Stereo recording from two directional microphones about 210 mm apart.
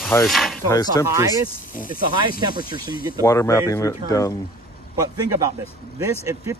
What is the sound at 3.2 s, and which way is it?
Speech, 15° left (ahead or behind).